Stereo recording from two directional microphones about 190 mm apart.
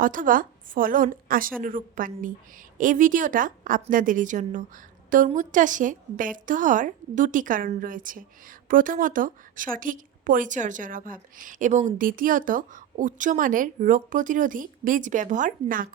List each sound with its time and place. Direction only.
0.0 s a woman's voice: 45° right (ahead or behind)